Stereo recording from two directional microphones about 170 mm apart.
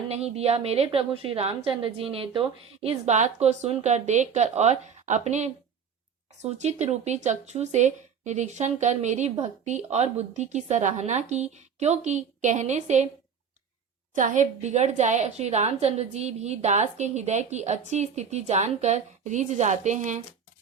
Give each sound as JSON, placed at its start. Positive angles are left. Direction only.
{"t": 0.1, "sound": "a woman's voice", "side_deg": -40}
{"t": 14.2, "sound": "speech", "side_deg": -45}